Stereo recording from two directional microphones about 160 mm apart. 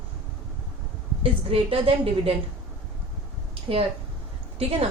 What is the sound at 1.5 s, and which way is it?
Speech, 35° right (ahead or behind).